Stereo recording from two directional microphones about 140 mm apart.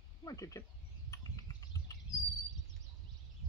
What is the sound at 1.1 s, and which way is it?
Bird, 25° left (ahead or behind).